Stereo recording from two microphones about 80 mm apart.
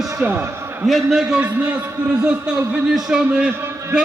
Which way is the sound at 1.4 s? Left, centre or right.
Centre.